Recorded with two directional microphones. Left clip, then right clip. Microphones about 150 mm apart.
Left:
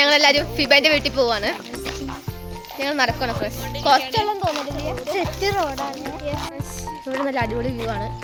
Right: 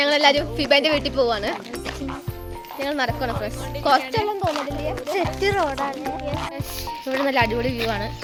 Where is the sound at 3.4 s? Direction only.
Centre (ahead or behind).